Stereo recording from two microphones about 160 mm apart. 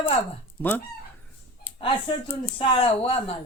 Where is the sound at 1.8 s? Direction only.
35° left (ahead or behind).